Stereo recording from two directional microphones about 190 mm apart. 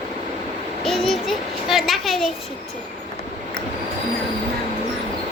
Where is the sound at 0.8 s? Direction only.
Centre (ahead or behind).